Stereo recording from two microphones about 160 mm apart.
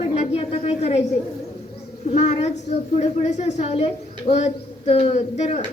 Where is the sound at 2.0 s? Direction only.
45° left (ahead or behind).